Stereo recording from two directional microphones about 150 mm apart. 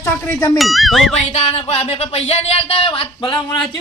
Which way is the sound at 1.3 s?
45° left (ahead or behind).